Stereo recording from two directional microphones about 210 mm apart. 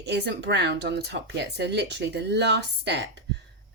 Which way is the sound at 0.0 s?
50° right (ahead or behind).